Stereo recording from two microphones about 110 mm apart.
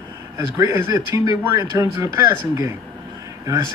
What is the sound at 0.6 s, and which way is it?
A man's voice, 25° right (ahead or behind).